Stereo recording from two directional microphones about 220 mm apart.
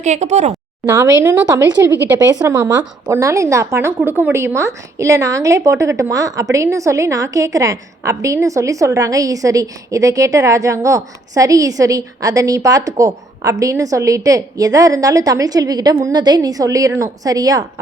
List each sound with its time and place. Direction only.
0.0 s a woman's voice: 30° right (ahead or behind)
0.9 s a woman's voice: 10° right (ahead or behind)